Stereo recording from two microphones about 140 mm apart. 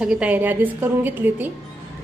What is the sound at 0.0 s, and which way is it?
A woman's voice, 10° right (ahead or behind).